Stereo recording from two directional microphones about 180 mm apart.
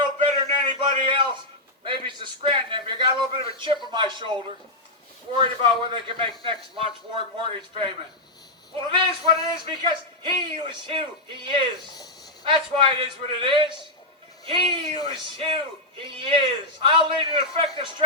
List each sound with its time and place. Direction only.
0.0 s a sound: 25° right (ahead or behind)
1.8 s speech: 25° right (ahead or behind)
5.9 s speech: 30° right (ahead or behind)